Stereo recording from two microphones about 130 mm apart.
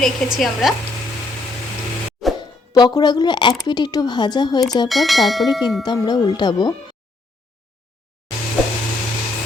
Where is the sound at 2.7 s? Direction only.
30° left (ahead or behind).